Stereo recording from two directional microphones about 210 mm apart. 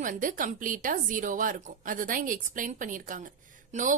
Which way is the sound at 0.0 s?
40° right (ahead or behind).